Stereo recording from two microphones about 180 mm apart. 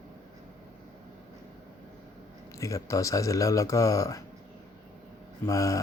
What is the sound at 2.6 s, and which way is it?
Speech, 15° left (ahead or behind).